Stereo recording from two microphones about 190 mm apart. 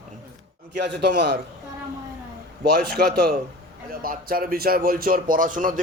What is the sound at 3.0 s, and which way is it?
A man's voice, 55° right (ahead or behind).